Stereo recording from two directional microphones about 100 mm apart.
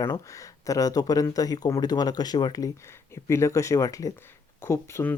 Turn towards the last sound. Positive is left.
turn(degrees=25)  # may be behind; listen again after turning